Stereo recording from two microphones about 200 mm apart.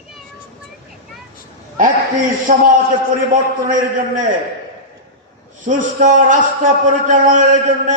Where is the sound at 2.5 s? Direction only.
40° right (ahead or behind).